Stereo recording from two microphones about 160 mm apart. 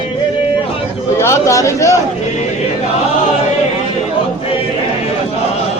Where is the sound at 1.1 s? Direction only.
15° left (ahead or behind).